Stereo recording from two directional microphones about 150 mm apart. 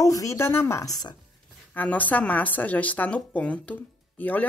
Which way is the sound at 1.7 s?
10° left (ahead or behind).